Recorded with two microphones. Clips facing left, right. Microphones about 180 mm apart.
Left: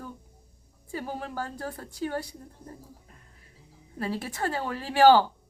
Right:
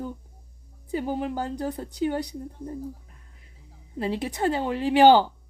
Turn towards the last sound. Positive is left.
turn(degrees=-20)  # may be behind; listen again after turning